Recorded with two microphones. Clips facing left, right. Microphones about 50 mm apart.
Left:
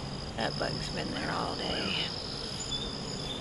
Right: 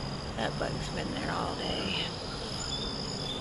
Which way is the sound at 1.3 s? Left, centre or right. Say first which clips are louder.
Even; centre.